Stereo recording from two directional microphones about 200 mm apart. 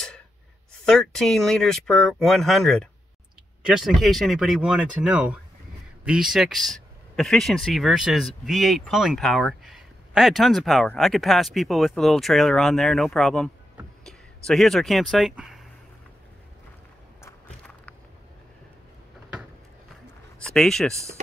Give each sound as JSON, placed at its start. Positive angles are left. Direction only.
{"t": 0.8, "sound": "speech", "side_deg": 0}
{"t": 17.2, "sound": "a sound", "side_deg": 5}
{"t": 20.4, "sound": "speech", "side_deg": 0}